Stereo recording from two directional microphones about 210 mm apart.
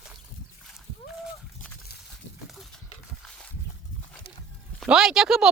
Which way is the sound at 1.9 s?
50° left (ahead or behind).